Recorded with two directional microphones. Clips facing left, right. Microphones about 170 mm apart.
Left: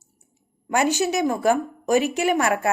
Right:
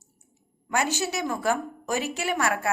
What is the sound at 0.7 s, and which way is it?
Speech, 15° left (ahead or behind).